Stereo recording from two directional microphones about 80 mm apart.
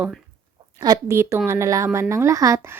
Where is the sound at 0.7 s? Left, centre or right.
Right.